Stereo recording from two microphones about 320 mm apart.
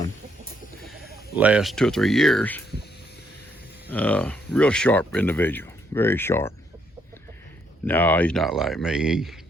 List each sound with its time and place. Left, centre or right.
1.4 s speech: centre
3.8 s speech: centre
7.9 s speech: centre